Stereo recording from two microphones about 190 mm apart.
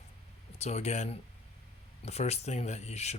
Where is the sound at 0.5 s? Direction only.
35° left (ahead or behind).